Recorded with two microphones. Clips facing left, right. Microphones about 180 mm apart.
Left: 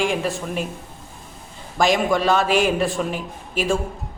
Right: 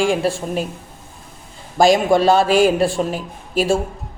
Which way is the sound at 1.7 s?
35° right (ahead or behind).